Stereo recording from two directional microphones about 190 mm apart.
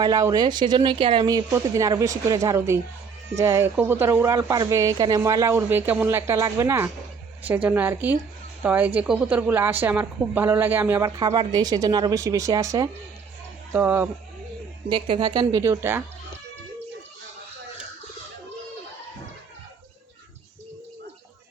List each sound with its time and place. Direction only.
0.0 s speech: 20° right (ahead or behind)
11.2 s speech: 20° right (ahead or behind)
14.8 s speech: 25° right (ahead or behind)